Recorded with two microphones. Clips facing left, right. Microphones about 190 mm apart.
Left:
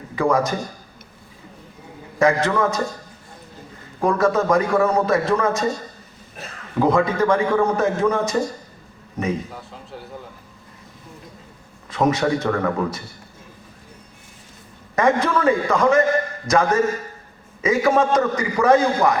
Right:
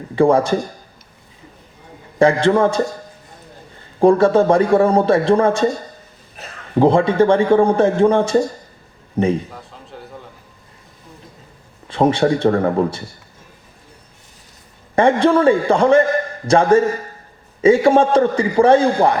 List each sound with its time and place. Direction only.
0.2 s a man's voice: 30° right (ahead or behind)
2.1 s a man's voice: 30° right (ahead or behind)
4.0 s a man's voice: 30° right (ahead or behind)
6.7 s a man's voice: 30° right (ahead or behind)
9.5 s a man's voice: centre (ahead or behind)
11.9 s a man's voice: 30° right (ahead or behind)
14.9 s a man's voice: 30° right (ahead or behind)